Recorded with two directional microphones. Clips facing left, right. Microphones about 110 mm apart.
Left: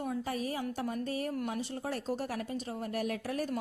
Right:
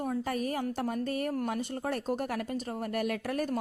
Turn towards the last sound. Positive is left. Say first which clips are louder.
# right 3 dB
turn(degrees=-55)  # may be behind; listen again after turning